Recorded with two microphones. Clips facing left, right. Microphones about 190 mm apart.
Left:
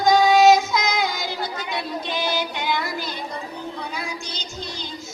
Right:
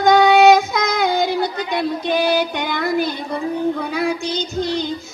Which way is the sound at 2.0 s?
55° right (ahead or behind).